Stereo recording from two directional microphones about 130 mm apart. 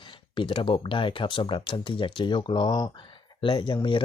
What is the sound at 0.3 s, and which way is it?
Speech, 40° left (ahead or behind).